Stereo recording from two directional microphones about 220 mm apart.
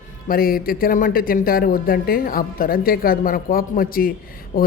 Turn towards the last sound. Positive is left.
turn(degrees=40)  # may be behind; listen again after turning